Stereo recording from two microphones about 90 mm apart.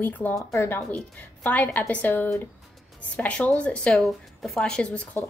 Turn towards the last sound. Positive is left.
turn(degrees=10)  # may be behind; listen again after turning